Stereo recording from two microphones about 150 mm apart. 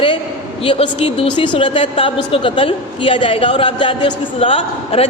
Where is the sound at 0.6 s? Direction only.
40° left (ahead or behind).